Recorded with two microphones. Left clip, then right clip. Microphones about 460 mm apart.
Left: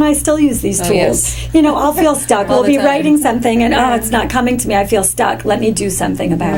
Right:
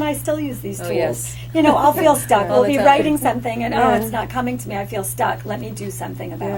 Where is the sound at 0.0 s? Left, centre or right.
Left.